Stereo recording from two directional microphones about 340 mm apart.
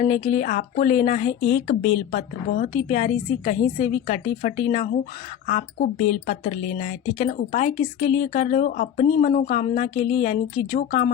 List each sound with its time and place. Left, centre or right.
0.0 s a woman's voice: centre